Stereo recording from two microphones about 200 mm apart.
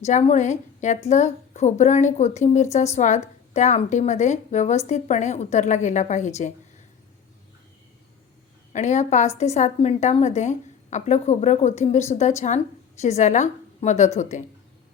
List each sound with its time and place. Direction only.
0.0 s a woman's voice: 35° left (ahead or behind)
8.7 s a woman's voice: 35° left (ahead or behind)